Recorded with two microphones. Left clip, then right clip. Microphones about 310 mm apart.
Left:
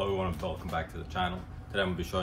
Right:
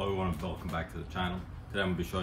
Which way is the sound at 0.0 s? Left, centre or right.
Centre.